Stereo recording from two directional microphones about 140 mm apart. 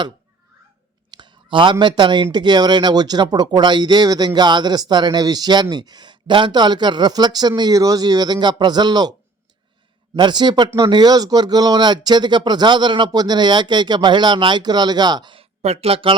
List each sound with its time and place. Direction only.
1.1 s clicking: 35° right (ahead or behind)
1.7 s speech: 30° right (ahead or behind)
10.2 s speech: 30° right (ahead or behind)